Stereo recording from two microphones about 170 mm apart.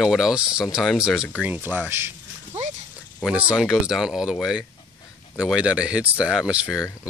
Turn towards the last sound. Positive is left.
turn(degrees=-5)  # may be behind; listen again after turning